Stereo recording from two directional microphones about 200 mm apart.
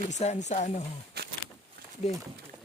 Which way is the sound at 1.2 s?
50° right (ahead or behind).